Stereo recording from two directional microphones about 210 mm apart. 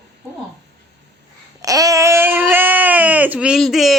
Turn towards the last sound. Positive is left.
turn(degrees=0)  # may be behind; listen again after turning